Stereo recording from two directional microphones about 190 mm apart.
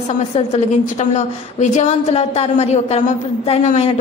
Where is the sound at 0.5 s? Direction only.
35° left (ahead or behind).